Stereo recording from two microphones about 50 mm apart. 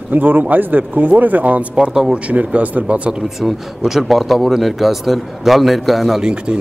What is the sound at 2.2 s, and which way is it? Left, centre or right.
Speech, right.